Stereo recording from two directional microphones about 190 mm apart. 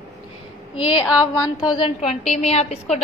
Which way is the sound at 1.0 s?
20° left (ahead or behind).